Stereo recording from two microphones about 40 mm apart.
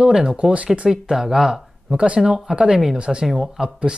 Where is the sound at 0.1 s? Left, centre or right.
Centre.